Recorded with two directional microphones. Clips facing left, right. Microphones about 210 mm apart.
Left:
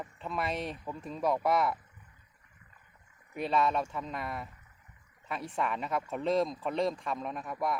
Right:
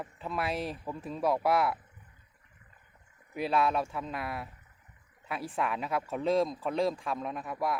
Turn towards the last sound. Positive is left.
turn(degrees=0)  # may be behind; listen again after turning